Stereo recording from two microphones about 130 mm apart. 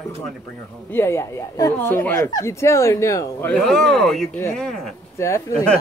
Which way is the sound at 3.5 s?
5° left (ahead or behind).